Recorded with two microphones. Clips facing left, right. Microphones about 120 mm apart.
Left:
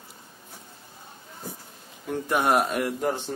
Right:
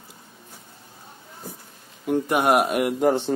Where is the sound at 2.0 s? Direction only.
15° right (ahead or behind).